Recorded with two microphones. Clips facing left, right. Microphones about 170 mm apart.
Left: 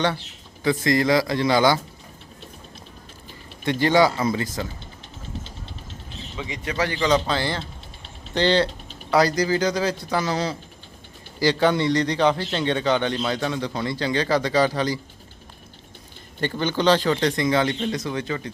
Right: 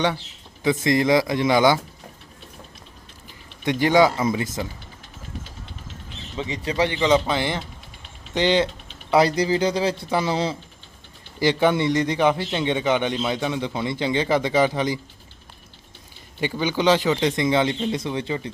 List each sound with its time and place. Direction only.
0.6 s speech: 20° right (ahead or behind)
3.7 s speech: 15° right (ahead or behind)
6.3 s a man's voice: 30° right (ahead or behind)
16.4 s a man's voice: 10° right (ahead or behind)